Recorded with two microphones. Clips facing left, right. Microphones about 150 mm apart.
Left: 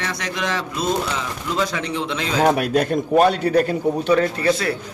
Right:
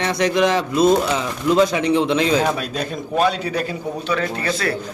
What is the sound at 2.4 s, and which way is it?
A man's voice, 65° left (ahead or behind).